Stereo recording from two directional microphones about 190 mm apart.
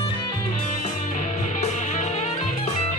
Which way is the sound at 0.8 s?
40° left (ahead or behind).